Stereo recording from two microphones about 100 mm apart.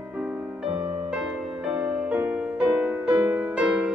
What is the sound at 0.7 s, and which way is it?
Music, 90° right.